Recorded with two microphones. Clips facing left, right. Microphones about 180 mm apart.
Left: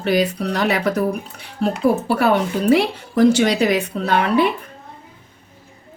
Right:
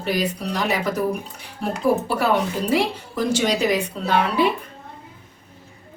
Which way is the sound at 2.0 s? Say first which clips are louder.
Left 3 dB; 65° left (ahead or behind).